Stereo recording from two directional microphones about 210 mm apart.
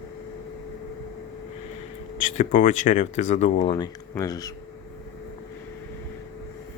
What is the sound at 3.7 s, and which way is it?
Speech, 20° left (ahead or behind).